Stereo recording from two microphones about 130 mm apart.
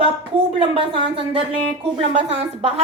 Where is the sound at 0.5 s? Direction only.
45° right (ahead or behind).